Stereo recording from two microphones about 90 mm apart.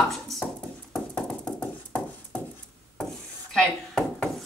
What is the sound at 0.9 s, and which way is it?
Music, 10° left (ahead or behind).